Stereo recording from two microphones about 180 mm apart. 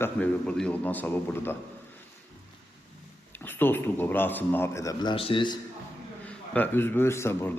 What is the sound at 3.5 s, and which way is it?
A man's voice, 10° left (ahead or behind).